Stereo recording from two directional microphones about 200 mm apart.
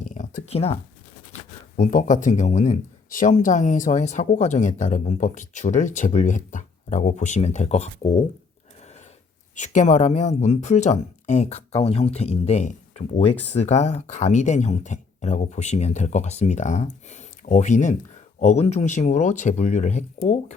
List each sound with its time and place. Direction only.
0.0 s a sound: 40° left (ahead or behind)
1.3 s speech: 40° left (ahead or behind)
9.6 s speech: 35° left (ahead or behind)